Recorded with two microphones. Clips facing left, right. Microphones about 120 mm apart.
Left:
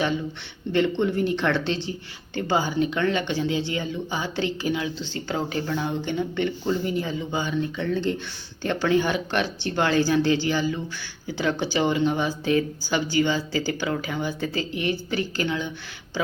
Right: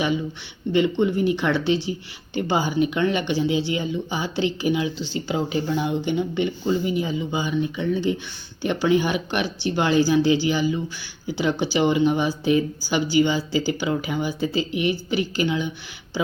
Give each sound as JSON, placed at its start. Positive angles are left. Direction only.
{"t": 0.7, "sound": "speech", "side_deg": -10}